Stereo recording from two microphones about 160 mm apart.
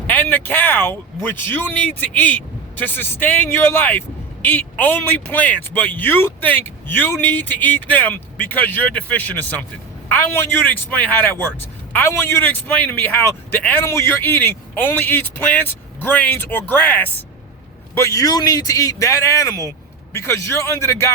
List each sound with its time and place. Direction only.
0.1 s a man's voice: 10° left (ahead or behind)